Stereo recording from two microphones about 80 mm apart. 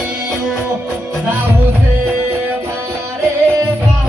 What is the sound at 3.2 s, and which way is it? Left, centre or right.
Music, right.